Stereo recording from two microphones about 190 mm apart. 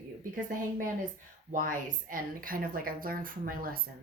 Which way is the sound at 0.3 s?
45° right (ahead or behind).